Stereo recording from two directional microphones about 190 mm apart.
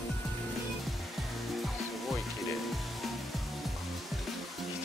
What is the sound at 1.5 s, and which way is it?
Music, centre (ahead or behind).